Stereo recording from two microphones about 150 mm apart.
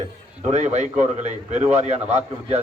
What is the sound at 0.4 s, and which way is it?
A man's voice, 50° right (ahead or behind).